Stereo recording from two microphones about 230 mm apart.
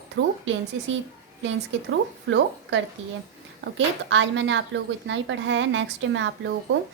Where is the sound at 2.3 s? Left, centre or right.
Right.